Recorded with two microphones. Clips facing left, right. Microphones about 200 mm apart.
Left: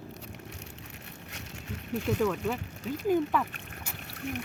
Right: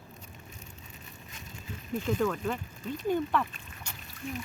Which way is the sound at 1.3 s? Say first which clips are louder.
Left 3 dB; 75° left (ahead or behind).